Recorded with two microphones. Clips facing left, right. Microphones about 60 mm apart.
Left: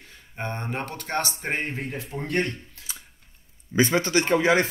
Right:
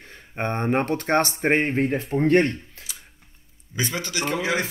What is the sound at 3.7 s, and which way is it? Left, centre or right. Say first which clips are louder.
Speech: left 7 dB; left.